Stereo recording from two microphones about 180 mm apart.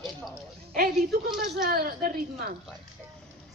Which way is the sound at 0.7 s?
55° right (ahead or behind).